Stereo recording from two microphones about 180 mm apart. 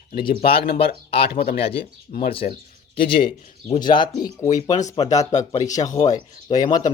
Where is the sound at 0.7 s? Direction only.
30° left (ahead or behind).